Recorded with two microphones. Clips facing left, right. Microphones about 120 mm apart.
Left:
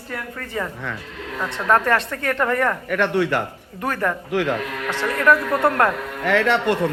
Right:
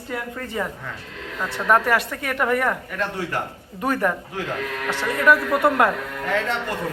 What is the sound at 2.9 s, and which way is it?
Speech, 75° left (ahead or behind).